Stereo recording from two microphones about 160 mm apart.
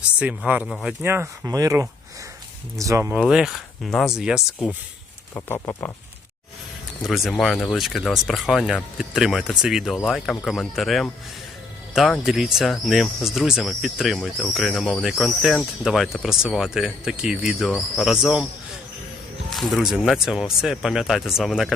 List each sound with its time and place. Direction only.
0.2 s speech: 5° right (ahead or behind)
1.0 s speech: 15° right (ahead or behind)
3.1 s speech: 5° right (ahead or behind)
5.3 s speech: 15° left (ahead or behind)
7.0 s speech: centre (ahead or behind)
19.5 s speech: centre (ahead or behind)